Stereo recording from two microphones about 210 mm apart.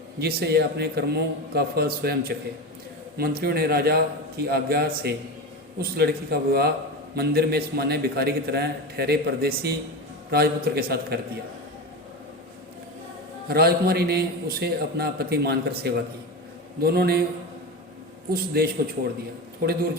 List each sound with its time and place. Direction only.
0.2 s a man's voice: 50° right (ahead or behind)
13.5 s a man's voice: 50° right (ahead or behind)
18.3 s a man's voice: 45° right (ahead or behind)